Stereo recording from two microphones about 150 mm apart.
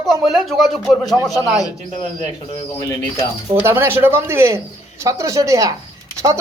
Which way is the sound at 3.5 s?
15° right (ahead or behind).